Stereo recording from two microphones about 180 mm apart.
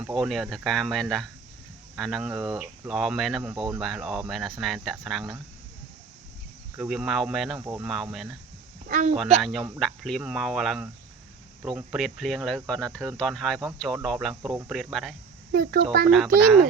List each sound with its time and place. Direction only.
0.0 s speech: centre (ahead or behind)
6.7 s speech: centre (ahead or behind)
8.9 s speech: 45° right (ahead or behind)
9.4 s speech: centre (ahead or behind)
15.5 s speech: 55° right (ahead or behind)
16.0 s speech: centre (ahead or behind)